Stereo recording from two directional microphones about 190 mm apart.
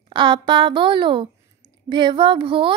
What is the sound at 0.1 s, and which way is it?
A woman's voice, 25° right (ahead or behind).